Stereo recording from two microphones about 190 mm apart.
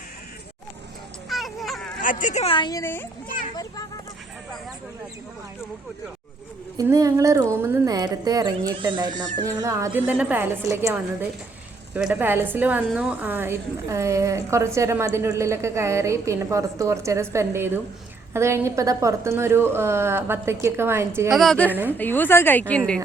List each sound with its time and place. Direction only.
1.3 s a sound: centre (ahead or behind)
2.0 s speech: 45° left (ahead or behind); by 3.1 s 10° left (ahead or behind)
3.2 s children playing: 45° left (ahead or behind)
6.7 s a woman's voice: 20° right (ahead or behind)
21.2 s a woman's voice: centre (ahead or behind)
21.7 s a woman's voice: 10° right (ahead or behind)
21.9 s a woman's voice: 10° left (ahead or behind)